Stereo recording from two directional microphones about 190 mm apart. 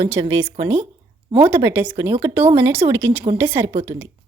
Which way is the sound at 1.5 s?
10° right (ahead or behind).